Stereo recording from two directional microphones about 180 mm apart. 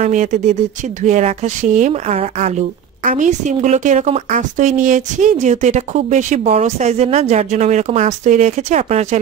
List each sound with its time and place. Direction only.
0.0 s speech: 40° right (ahead or behind)